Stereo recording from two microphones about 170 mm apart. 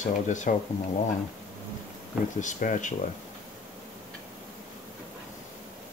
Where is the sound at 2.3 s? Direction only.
45° left (ahead or behind).